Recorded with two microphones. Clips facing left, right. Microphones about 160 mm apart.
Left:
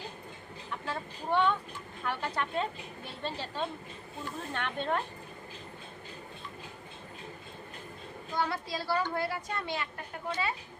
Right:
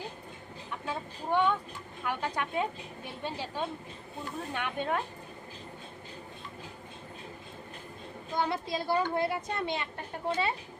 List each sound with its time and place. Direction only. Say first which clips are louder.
0.9 s a sound: right 1 dB; 15° right (ahead or behind)
2.0 s a woman's voice: right 1 dB; 15° right (ahead or behind)
8.4 s speech: right 2 dB; 20° right (ahead or behind)